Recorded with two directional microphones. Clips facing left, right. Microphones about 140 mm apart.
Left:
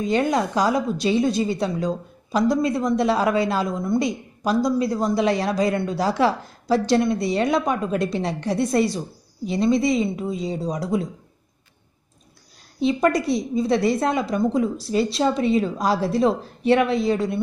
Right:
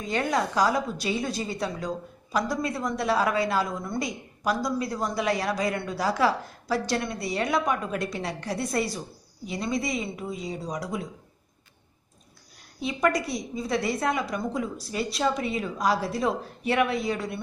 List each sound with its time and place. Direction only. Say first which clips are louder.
0.0 s a woman's voice: left 6 dB; 20° left (ahead or behind)
12.8 s a woman's voice: left 6 dB; 30° left (ahead or behind)